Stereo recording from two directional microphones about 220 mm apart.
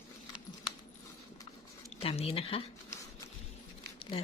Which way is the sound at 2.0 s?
25° left (ahead or behind).